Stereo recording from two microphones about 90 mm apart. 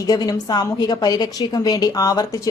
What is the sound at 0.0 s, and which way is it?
A woman's voice, 45° left (ahead or behind).